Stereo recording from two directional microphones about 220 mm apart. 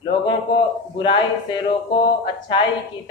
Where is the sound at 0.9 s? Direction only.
20° left (ahead or behind).